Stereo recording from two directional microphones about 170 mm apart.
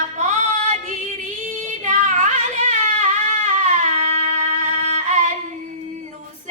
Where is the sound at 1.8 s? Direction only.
45° right (ahead or behind).